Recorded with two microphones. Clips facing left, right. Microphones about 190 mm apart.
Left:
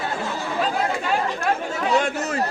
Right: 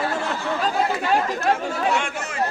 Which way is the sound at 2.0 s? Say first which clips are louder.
Left 5 dB; 40° left (ahead or behind).